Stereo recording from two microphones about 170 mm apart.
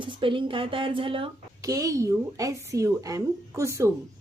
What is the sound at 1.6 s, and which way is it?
A woman's voice, 20° right (ahead or behind).